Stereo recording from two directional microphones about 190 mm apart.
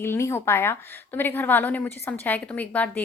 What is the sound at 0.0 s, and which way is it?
A woman's voice, 15° left (ahead or behind).